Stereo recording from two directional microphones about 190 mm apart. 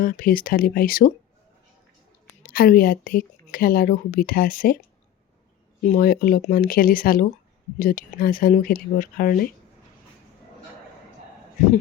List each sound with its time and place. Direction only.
0.0 s speech: 50° left (ahead or behind)
2.5 s speech: 50° left (ahead or behind)
5.8 s speech: 45° left (ahead or behind)